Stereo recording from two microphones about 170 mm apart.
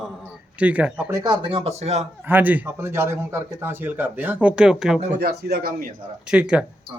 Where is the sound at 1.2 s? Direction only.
30° right (ahead or behind).